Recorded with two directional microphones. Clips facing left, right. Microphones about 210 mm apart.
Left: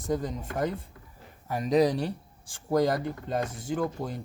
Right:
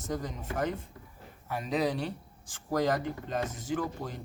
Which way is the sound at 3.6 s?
30° left (ahead or behind).